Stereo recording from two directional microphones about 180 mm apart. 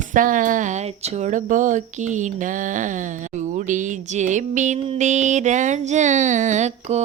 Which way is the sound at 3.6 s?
45° right (ahead or behind).